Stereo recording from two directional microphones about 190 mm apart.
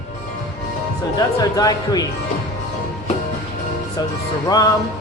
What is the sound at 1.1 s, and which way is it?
Speech, 20° left (ahead or behind).